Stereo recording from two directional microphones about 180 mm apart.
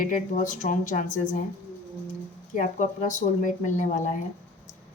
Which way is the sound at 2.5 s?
45° left (ahead or behind).